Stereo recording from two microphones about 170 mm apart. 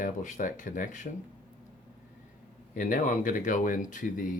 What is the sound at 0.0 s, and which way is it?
Speech, 50° left (ahead or behind).